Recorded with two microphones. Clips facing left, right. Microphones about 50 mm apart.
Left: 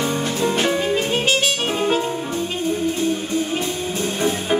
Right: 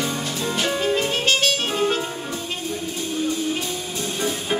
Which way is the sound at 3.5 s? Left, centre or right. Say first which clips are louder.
Left 4 dB; left.